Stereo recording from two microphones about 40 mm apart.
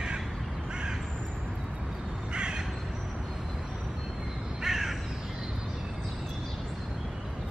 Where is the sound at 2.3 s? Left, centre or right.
Right.